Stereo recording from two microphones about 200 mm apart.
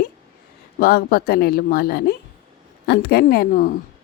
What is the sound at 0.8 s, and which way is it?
Speech, 50° left (ahead or behind).